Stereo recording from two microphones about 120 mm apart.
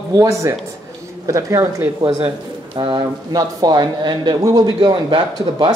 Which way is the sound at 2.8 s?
40° right (ahead or behind).